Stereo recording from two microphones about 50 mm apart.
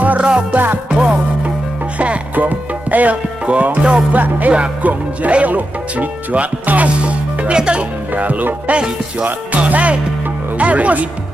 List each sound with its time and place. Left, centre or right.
0.2 s music: centre
0.5 s speech: right
0.8 s music: right
4.1 s speech: right
6.9 s music: right
8.1 s speech: right
9.2 s music: right
10.6 s speech: right